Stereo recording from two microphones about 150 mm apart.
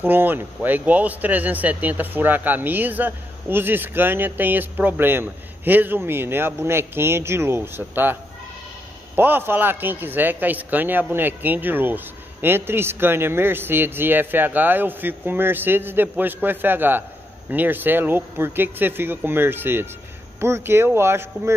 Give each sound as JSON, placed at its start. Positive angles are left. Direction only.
{"t": 0.0, "sound": "speech", "side_deg": -15}